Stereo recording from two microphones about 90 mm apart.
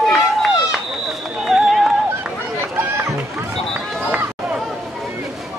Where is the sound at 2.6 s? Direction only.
25° right (ahead or behind).